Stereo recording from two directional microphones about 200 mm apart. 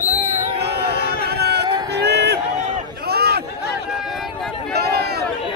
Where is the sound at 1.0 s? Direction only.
55° right (ahead or behind).